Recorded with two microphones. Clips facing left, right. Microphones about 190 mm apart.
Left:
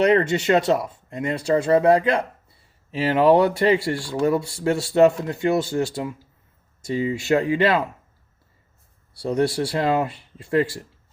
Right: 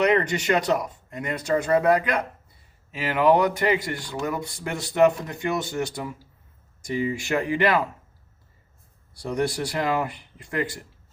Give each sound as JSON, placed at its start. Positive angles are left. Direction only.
{"t": 0.0, "sound": "speech", "side_deg": 30}
{"t": 9.2, "sound": "speech", "side_deg": 25}